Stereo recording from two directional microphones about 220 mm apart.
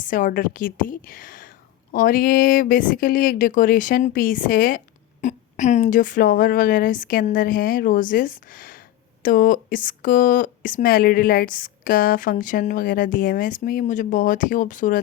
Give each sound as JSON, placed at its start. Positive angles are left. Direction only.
{"t": 0.0, "sound": "speech", "side_deg": 35}